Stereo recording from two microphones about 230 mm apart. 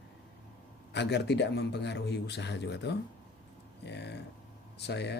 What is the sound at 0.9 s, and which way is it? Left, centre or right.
Speech, left.